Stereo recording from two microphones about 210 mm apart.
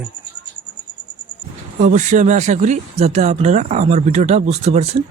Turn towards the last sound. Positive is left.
turn(degrees=-30)  # may be behind; listen again after turning